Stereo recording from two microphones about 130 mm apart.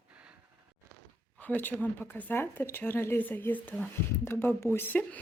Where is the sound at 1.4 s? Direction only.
15° left (ahead or behind).